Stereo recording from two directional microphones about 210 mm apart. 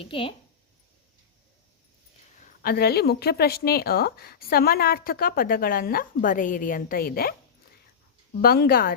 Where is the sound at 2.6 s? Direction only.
45° left (ahead or behind).